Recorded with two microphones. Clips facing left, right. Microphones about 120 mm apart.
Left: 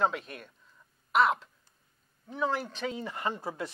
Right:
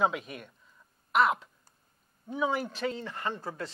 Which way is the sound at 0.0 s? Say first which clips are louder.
Right 1 dB; 5° right (ahead or behind).